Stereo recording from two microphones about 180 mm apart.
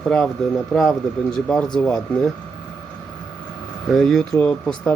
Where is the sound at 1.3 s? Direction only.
Centre (ahead or behind).